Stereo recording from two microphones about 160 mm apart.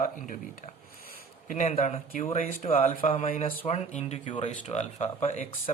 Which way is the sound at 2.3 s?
55° left (ahead or behind).